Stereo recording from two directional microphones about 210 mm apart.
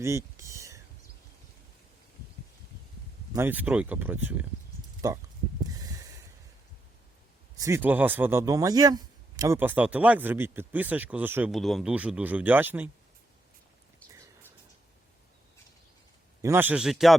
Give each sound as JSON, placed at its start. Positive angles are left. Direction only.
{"t": 0.0, "sound": "a sound", "side_deg": -15}
{"t": 3.3, "sound": "speech", "side_deg": -10}
{"t": 5.6, "sound": "snort", "side_deg": -15}
{"t": 7.6, "sound": "speech", "side_deg": -10}
{"t": 14.1, "sound": "a sound", "side_deg": -15}
{"t": 16.4, "sound": "speech", "side_deg": -10}